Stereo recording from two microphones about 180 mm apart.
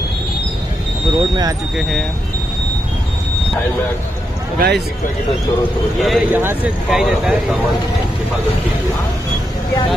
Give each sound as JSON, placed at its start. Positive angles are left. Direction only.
{"t": 1.8, "sound": "speech", "side_deg": 0}
{"t": 4.6, "sound": "a man's voice", "side_deg": -65}
{"t": 6.0, "sound": "speech", "side_deg": 0}